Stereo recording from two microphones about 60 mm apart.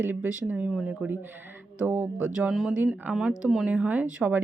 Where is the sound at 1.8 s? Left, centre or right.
Right.